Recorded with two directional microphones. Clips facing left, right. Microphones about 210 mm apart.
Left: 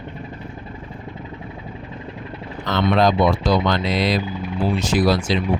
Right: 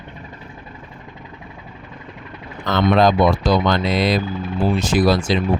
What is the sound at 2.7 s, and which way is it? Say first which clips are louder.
Speech: right 2 dB; 50° right (ahead or behind).